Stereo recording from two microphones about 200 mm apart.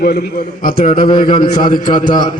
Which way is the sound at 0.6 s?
45° left (ahead or behind).